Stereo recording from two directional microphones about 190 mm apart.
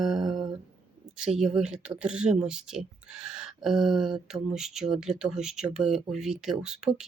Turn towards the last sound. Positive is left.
turn(degrees=-5)  # may be behind; listen again after turning